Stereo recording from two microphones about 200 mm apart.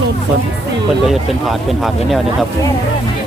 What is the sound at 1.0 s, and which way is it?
Speech, centre (ahead or behind).